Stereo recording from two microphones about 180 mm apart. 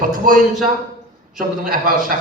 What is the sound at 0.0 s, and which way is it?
A man's voice, 50° right (ahead or behind).